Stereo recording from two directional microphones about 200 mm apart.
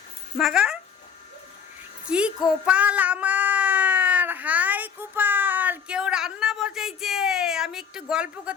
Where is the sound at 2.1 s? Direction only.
5° right (ahead or behind).